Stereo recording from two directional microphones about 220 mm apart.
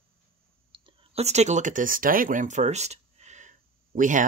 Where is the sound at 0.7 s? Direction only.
30° right (ahead or behind).